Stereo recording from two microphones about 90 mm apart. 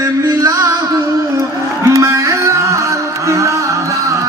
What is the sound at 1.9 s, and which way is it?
Music, 35° right (ahead or behind).